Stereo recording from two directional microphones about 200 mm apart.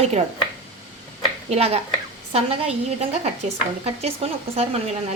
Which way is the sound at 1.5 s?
30° right (ahead or behind).